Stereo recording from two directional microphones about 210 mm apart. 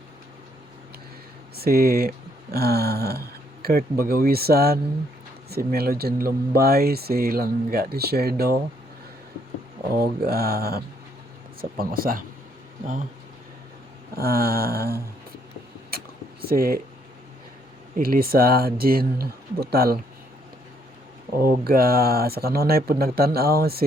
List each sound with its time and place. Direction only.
1.5 s speech: 45° right (ahead or behind)
10.0 s speech: 45° right (ahead or behind)
14.2 s speech: 45° right (ahead or behind)
15.9 s a sound: 45° right (ahead or behind)
17.9 s speech: 45° right (ahead or behind)
21.4 s speech: 45° right (ahead or behind)